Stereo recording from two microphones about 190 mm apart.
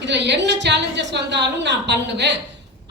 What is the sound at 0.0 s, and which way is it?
A woman's voice, 65° right (ahead or behind).